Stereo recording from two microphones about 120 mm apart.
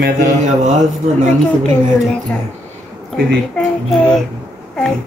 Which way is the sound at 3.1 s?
5° left (ahead or behind).